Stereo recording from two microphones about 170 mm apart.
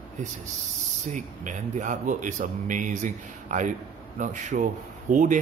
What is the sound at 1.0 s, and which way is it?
Speech, 45° right (ahead or behind).